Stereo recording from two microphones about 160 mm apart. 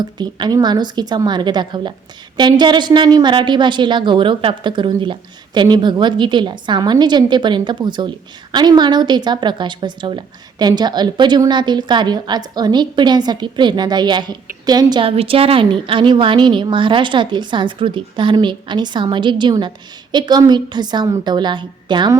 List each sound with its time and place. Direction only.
0.0 s a woman's voice: 25° right (ahead or behind)